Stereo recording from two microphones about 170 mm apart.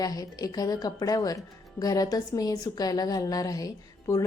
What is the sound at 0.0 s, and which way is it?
A woman's voice, 20° left (ahead or behind).